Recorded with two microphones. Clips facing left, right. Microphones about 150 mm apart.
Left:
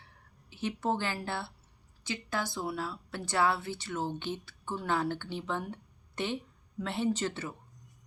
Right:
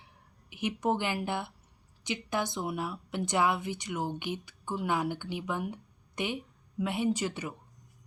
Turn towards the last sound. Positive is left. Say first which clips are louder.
# right 1 dB
turn(degrees=-15)  # may be behind; listen again after turning